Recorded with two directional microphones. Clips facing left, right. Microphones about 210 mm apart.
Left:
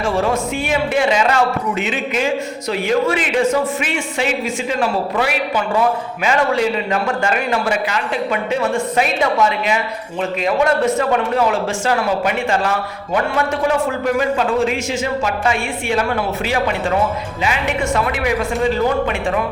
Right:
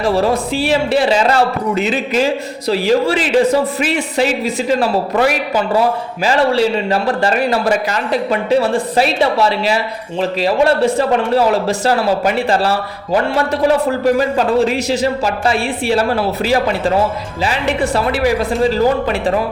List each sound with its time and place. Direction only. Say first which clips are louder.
0.0 s speech: right 3 dB; 35° right (ahead or behind)